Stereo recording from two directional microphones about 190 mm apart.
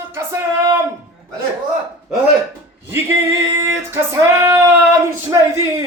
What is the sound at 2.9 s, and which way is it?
Male singing, 15° right (ahead or behind).